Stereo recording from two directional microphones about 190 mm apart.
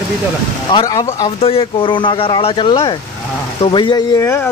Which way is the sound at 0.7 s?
25° left (ahead or behind).